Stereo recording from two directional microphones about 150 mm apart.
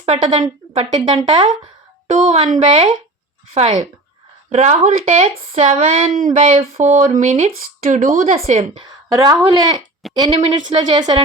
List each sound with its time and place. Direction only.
0.0 s speech: 35° right (ahead or behind)
2.0 s speech: 55° right (ahead or behind)
2.6 s speech: 35° right (ahead or behind)
3.5 s speech: 45° right (ahead or behind)
5.7 s speech: 60° right (ahead or behind)
8.5 s speech: 35° right (ahead or behind)